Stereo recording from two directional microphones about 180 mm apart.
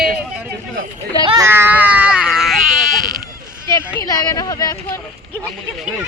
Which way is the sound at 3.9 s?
20° left (ahead or behind).